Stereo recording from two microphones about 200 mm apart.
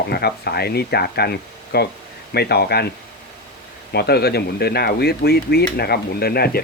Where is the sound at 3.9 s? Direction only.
55° left (ahead or behind).